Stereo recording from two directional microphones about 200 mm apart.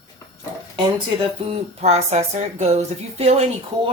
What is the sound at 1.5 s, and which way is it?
Speech, 30° right (ahead or behind).